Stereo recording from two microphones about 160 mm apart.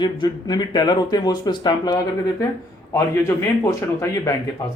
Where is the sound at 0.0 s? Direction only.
25° left (ahead or behind).